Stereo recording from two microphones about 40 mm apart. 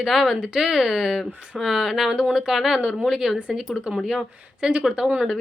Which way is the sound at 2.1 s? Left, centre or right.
Centre.